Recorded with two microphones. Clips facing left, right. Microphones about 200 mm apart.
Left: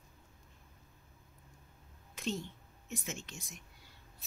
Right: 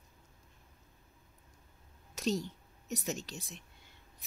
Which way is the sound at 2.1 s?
40° right (ahead or behind).